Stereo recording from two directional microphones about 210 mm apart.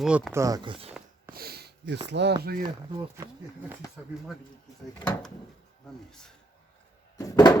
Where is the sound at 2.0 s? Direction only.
55° right (ahead or behind).